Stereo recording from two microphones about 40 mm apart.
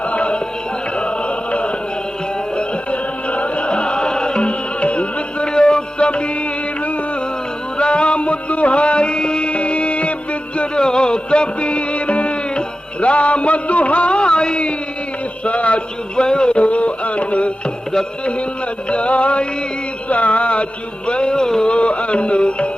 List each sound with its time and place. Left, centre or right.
0.1 s music: left
7.8 s music: left
10.6 s music: left
15.4 s a sound: left
16.2 s a sound: left
18.9 s music: left
20.1 s a sound: left
21.1 s music: left
21.7 s music: left